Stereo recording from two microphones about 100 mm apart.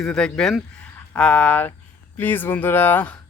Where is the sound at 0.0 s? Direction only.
5° left (ahead or behind).